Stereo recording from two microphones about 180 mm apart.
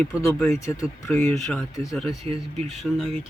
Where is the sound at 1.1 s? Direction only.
5° left (ahead or behind).